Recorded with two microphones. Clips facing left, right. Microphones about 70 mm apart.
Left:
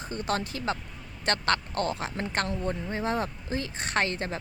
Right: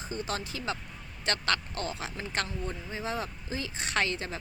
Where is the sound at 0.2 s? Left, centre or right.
Left.